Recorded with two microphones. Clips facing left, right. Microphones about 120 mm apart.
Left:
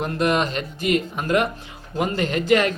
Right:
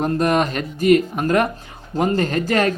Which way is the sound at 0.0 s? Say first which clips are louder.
Right 3 dB; 40° right (ahead or behind).